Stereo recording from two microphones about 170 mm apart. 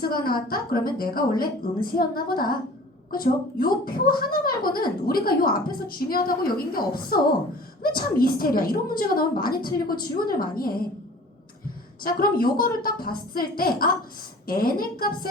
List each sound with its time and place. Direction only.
0.0 s a woman's voice: 60° left (ahead or behind)
12.0 s a woman's voice: 60° left (ahead or behind)